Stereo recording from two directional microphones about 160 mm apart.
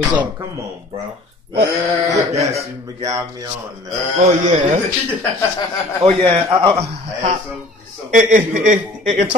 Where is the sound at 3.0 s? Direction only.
20° right (ahead or behind).